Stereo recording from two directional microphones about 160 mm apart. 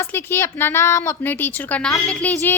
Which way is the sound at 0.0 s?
15° left (ahead or behind).